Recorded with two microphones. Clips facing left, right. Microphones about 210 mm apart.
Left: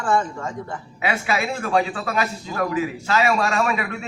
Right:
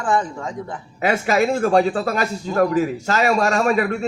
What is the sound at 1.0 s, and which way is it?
A man's voice, 40° right (ahead or behind).